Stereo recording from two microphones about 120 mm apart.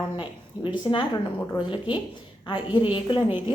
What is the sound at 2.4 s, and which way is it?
Speech, 45° left (ahead or behind).